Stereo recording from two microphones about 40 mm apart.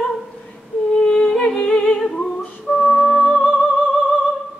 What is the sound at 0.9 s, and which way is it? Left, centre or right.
Music, centre.